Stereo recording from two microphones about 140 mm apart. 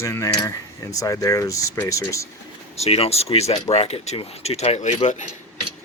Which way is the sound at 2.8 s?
45° left (ahead or behind).